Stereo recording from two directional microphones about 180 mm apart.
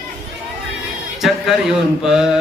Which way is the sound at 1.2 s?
Centre (ahead or behind).